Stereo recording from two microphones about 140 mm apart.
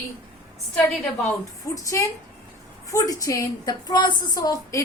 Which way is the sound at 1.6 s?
25° left (ahead or behind).